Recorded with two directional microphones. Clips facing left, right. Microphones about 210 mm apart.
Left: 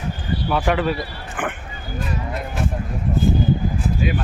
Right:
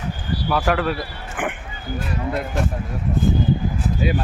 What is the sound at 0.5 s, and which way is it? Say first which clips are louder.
Speech: even; centre (ahead or behind).